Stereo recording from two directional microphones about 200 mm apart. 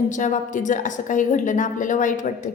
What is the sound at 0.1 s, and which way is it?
A woman's voice, 40° left (ahead or behind).